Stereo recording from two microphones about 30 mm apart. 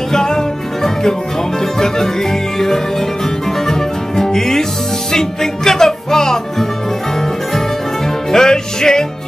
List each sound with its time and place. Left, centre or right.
0.1 s music: centre
3.6 s music: centre
8.3 s music: centre